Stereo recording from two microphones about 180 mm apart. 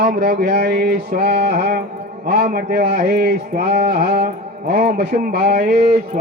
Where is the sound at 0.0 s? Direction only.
60° right (ahead or behind).